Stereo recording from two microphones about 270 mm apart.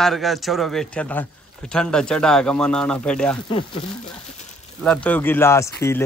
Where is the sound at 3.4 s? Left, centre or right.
Centre.